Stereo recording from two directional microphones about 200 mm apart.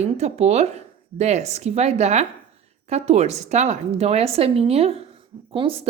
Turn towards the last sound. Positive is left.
turn(degrees=-30)  # may be behind; listen again after turning